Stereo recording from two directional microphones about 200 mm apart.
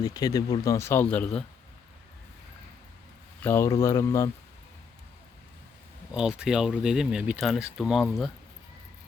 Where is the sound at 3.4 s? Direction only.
10° left (ahead or behind).